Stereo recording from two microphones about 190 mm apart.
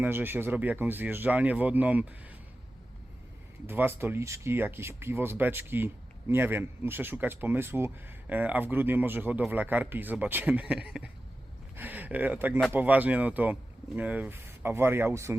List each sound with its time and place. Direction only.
0.0 s speech: 10° right (ahead or behind)
3.7 s speech: 10° right (ahead or behind)